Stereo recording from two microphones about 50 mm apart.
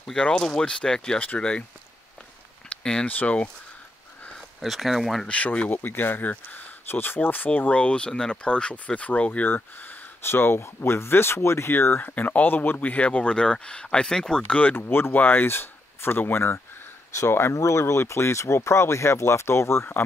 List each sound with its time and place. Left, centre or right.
0.2 s speech: centre
2.8 s speech: centre
3.1 s speech: left
4.6 s speech: centre
5.3 s speech: left
5.7 s speech: left
7.8 s speech: left
9.5 s speech: left
12.0 s speech: left
12.9 s speech: left
14.8 s speech: left
17.6 s speech: left